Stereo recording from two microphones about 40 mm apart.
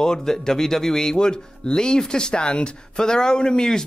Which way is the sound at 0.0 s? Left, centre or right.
Centre.